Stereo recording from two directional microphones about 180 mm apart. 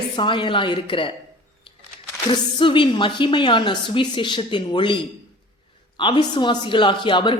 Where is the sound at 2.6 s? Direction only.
25° left (ahead or behind).